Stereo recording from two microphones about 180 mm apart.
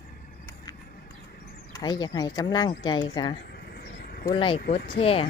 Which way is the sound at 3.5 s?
60° left (ahead or behind).